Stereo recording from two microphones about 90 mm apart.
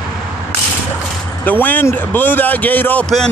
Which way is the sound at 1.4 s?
20° left (ahead or behind).